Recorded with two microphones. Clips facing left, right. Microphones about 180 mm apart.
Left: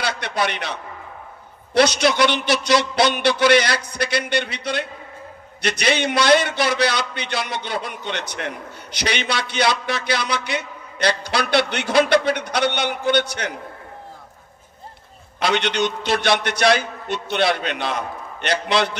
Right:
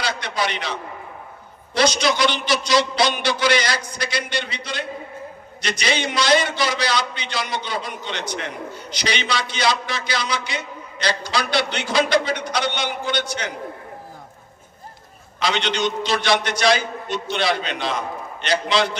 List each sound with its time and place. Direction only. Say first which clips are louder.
0.0 s a man's voice: left 1 dB; 60° left (ahead or behind)
15.3 s a man's voice: left 2 dB; 60° left (ahead or behind)